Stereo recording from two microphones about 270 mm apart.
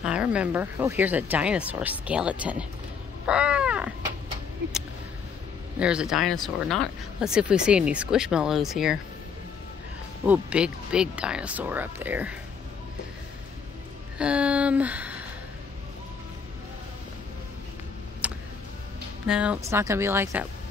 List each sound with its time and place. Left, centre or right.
0.0 s speech: centre
3.3 s cat: centre
5.8 s speech: centre
10.2 s speech: centre
14.1 s a sound: centre
18.2 s a sound: centre
19.2 s speech: centre